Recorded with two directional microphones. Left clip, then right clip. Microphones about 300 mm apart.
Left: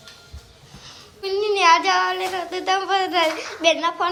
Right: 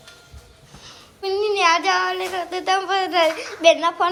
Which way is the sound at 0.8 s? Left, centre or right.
Centre.